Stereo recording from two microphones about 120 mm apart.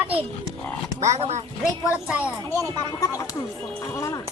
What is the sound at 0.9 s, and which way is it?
Roaring cats, 70° right (ahead or behind).